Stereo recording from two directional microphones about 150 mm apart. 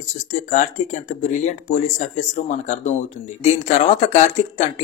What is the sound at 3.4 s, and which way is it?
Speech, 45° left (ahead or behind).